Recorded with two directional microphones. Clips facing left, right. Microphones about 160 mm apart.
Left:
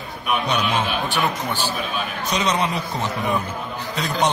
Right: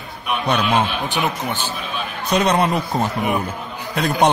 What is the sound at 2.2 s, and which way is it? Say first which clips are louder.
Speech: right 6 dB; 55° right (ahead or behind).